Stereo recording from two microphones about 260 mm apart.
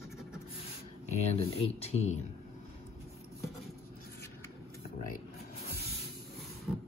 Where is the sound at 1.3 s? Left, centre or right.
Left.